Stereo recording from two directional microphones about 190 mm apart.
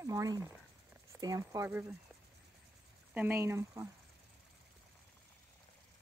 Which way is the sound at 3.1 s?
10° right (ahead or behind).